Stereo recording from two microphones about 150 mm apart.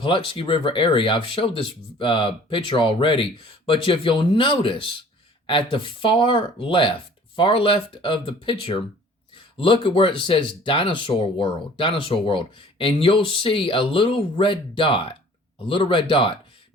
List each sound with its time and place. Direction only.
0.0 s speech: 35° left (ahead or behind)